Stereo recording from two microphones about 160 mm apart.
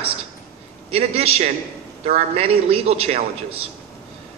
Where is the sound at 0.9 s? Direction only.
40° right (ahead or behind).